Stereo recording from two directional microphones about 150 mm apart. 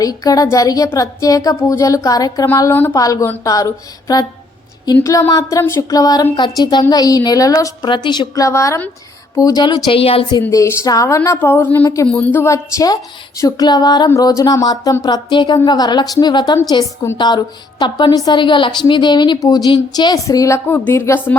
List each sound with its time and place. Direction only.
0.0 s a woman's voice: 25° left (ahead or behind)
4.9 s a woman's voice: 15° left (ahead or behind); by 10.4 s 35° left (ahead or behind)
10.5 s a woman's voice: 20° left (ahead or behind)